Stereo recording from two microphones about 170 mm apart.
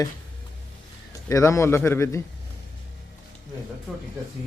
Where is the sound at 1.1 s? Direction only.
20° left (ahead or behind).